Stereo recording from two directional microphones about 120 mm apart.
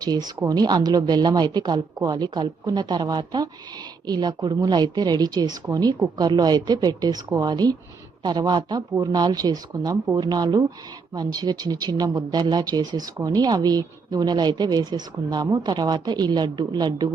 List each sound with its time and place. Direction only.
0.0 s speech: 35° right (ahead or behind)